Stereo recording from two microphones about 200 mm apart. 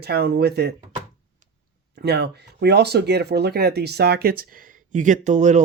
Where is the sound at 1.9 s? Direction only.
55° right (ahead or behind).